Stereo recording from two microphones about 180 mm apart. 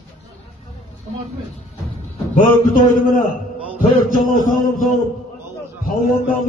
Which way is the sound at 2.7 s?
50° left (ahead or behind).